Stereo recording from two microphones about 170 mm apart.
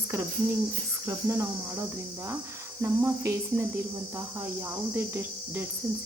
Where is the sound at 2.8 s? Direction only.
15° right (ahead or behind).